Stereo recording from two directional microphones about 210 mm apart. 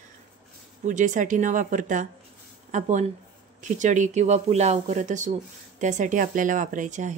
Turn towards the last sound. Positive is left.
turn(degrees=-35)  # may be behind; listen again after turning